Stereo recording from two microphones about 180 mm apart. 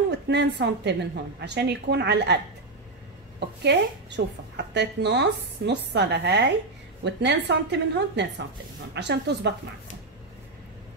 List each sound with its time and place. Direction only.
0.3 s a woman's voice: 70° right (ahead or behind)
4.2 s a woman's voice: 80° right
4.6 s a woman's voice: 70° right (ahead or behind)